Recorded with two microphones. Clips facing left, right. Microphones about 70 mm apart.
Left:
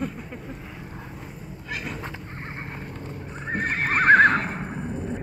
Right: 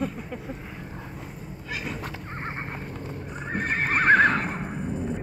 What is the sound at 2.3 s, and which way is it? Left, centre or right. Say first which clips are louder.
Neigh: right 3 dB; right.